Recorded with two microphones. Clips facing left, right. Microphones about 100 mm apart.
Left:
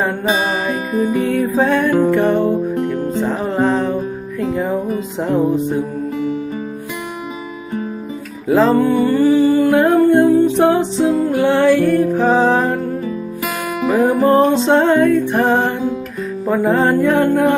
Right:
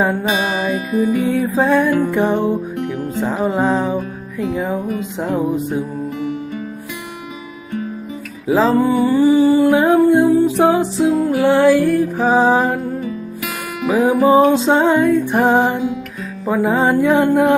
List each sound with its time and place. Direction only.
0.9 s music: 35° left (ahead or behind)
1.2 s music: 5° right (ahead or behind)
8.4 s music: 5° right (ahead or behind)
13.8 s music: 10° right (ahead or behind)